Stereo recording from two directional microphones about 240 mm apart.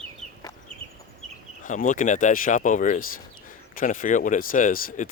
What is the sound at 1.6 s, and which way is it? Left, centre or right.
Speech, left.